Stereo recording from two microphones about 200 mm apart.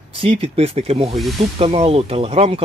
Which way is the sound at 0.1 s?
30° right (ahead or behind).